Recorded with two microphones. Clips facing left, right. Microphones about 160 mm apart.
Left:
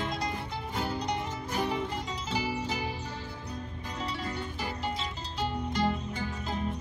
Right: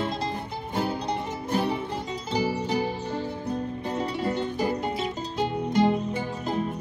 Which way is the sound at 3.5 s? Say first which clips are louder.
Right 11 dB; 55° right (ahead or behind).